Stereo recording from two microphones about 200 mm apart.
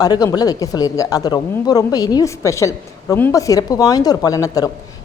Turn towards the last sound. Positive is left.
turn(degrees=15)  # may be behind; listen again after turning